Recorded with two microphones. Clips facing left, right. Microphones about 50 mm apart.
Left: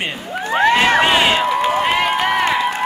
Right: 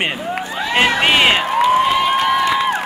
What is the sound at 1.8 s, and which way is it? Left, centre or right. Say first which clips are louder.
Crowd: right 2 dB; left.